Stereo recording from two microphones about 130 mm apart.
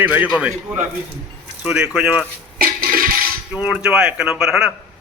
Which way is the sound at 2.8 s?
90° right.